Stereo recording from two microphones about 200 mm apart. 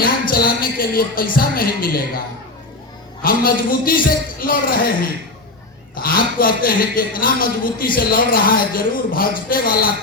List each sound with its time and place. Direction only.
0.0 s a man's voice: 45° left (ahead or behind)
3.2 s a man's voice: 45° left (ahead or behind)
5.9 s a man's voice: 45° left (ahead or behind)